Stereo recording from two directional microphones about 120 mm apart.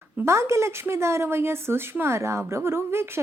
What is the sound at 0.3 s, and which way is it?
Speech, 25° right (ahead or behind).